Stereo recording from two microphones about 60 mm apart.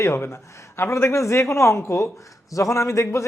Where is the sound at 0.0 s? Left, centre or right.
Left.